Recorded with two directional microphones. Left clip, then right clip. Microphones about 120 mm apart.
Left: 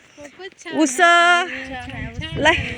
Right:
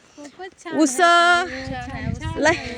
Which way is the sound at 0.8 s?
10° left (ahead or behind).